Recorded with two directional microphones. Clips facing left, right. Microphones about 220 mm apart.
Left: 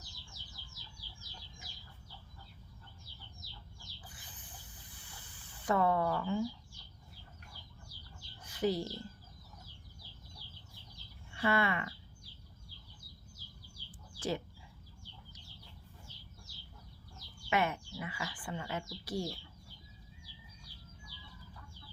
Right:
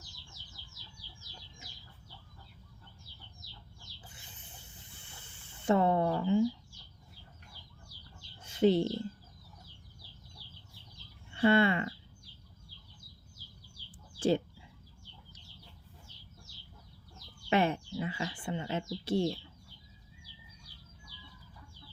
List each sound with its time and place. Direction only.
4.0 s snake: 25° right (ahead or behind)
8.4 s chicken: 25° right (ahead or behind)
11.3 s speech: 30° right (ahead or behind)
14.2 s bird: 30° right (ahead or behind)
17.5 s bird: 30° right (ahead or behind)